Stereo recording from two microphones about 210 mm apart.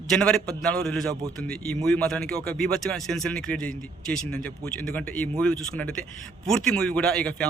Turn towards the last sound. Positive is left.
turn(degrees=5)  # may be behind; listen again after turning